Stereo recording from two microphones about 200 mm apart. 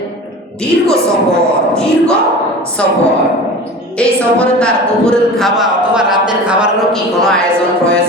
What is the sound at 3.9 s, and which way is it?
Speech, 5° left (ahead or behind).